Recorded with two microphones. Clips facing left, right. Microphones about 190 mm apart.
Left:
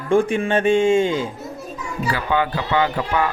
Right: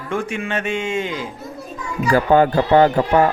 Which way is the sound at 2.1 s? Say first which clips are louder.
Right 9 dB; 45° right (ahead or behind).